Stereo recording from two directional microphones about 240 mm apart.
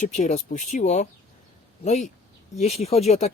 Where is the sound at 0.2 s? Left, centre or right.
Left.